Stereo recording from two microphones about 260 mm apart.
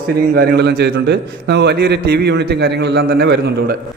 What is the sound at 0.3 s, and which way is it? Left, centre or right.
A man's voice, right.